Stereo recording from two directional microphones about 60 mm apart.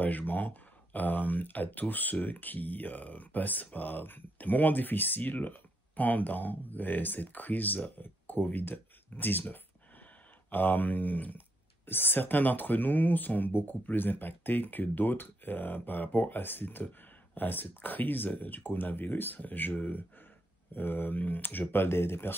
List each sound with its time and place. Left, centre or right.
0.0 s speech: left